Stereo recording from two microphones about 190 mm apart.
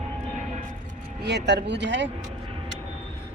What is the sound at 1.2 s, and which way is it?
Speech, 65° right (ahead or behind).